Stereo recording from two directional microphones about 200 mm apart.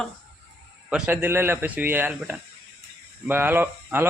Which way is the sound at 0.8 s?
5° right (ahead or behind).